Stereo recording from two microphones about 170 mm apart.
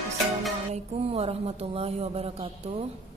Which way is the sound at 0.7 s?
35° right (ahead or behind).